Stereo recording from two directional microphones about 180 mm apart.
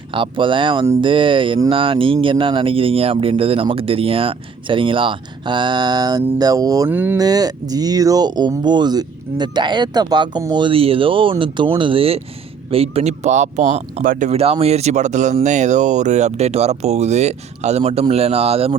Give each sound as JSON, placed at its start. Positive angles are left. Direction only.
{"t": 0.1, "sound": "speech", "side_deg": -30}